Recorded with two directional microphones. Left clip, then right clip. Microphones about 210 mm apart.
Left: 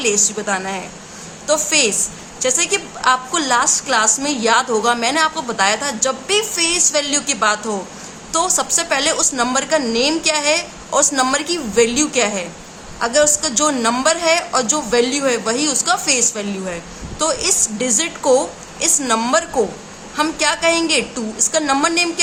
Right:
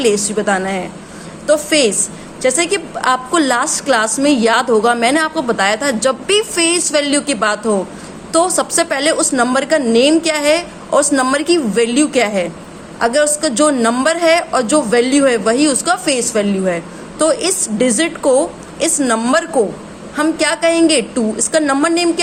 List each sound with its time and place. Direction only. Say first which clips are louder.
0.0 s a woman's voice: right 4 dB; 20° right (ahead or behind)